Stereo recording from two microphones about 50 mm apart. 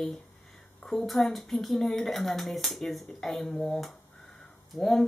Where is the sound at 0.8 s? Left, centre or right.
Centre.